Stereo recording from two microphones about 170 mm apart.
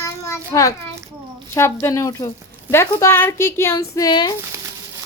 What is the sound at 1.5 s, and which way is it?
Speech, 15° left (ahead or behind).